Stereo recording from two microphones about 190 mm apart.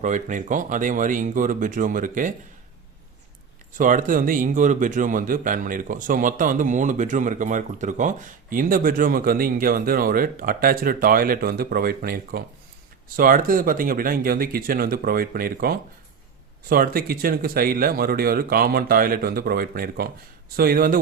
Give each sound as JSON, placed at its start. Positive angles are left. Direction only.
{"t": 0.0, "sound": "speech", "side_deg": -40}
{"t": 3.8, "sound": "speech", "side_deg": -45}